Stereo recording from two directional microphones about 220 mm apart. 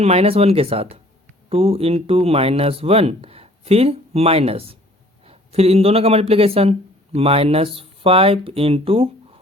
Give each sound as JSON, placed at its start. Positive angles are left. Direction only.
{"t": 0.0, "sound": "speech", "side_deg": -25}